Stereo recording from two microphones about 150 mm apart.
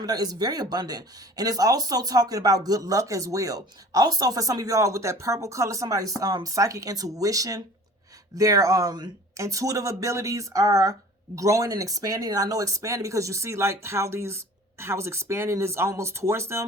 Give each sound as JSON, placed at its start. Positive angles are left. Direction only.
{"t": 0.0, "sound": "speech", "side_deg": -25}